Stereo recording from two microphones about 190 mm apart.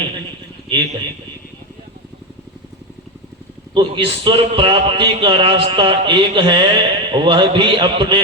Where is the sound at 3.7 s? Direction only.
25° right (ahead or behind).